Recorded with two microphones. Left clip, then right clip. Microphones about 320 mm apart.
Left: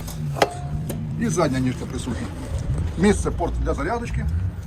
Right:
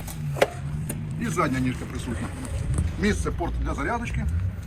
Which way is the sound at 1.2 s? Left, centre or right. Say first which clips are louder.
Left 3 dB; centre.